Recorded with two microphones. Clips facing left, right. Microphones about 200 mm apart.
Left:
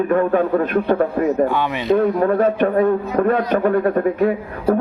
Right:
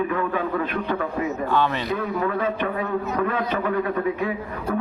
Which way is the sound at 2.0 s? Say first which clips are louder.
Left 9 dB; 45° left (ahead or behind).